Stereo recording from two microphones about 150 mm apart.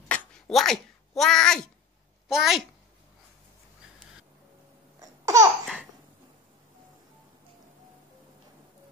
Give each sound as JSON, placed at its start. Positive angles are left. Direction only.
{"t": 0.1, "sound": "a sound", "side_deg": 5}
{"t": 2.2, "sound": "a child's voice", "side_deg": -5}
{"t": 5.0, "sound": "laughter", "side_deg": -20}